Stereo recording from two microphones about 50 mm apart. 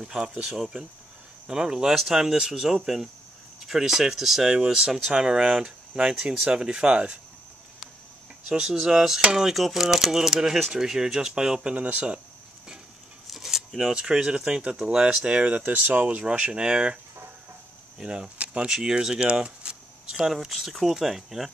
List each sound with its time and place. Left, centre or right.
0.0 s speech: centre
8.5 s speech: centre
11.7 s speech: right
13.3 s a sound: centre
13.7 s speech: centre; by 16.3 s right
16.3 s speech: right
20.1 s speech: centre